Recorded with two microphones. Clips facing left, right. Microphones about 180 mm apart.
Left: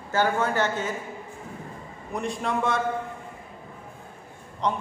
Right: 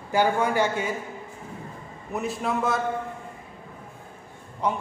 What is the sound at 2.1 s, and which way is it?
Speech, 5° right (ahead or behind).